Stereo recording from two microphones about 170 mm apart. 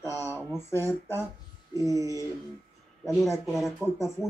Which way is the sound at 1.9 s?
20° right (ahead or behind).